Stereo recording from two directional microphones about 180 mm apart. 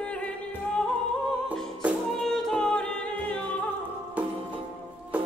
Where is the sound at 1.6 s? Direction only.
5° left (ahead or behind).